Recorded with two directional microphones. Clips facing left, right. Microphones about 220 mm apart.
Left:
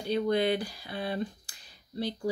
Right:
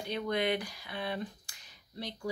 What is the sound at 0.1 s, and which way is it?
Speech, 30° left (ahead or behind).